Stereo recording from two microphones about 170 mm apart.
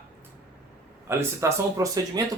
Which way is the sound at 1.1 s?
15° right (ahead or behind).